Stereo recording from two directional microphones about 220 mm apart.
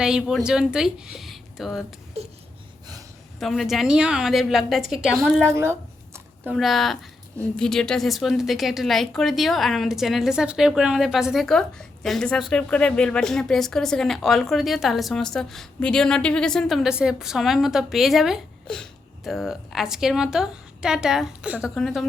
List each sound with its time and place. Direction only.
0.0 s a woman's voice: centre (ahead or behind)
2.2 s a sound: 30° right (ahead or behind)
3.4 s a woman's voice: centre (ahead or behind)
5.4 s a woman's voice: 10° right (ahead or behind)